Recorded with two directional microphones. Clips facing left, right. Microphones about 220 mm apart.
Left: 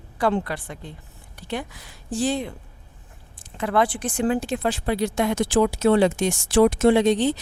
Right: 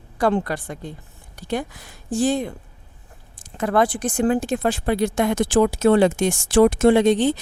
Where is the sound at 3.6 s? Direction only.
45° right (ahead or behind).